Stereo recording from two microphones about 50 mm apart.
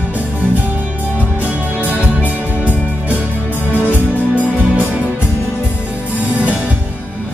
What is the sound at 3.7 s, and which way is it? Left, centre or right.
Music, left.